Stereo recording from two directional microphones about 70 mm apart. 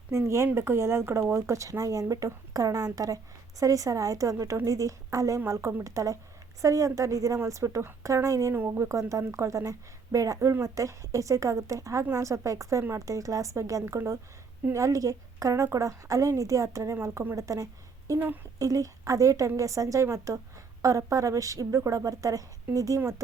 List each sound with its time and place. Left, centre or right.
0.1 s a woman's voice: right
8.5 s a woman's voice: right
13.8 s speech: right
14.7 s a woman's voice: right